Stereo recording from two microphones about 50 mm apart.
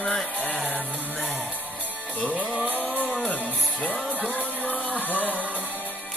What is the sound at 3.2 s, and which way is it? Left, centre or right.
Music, left.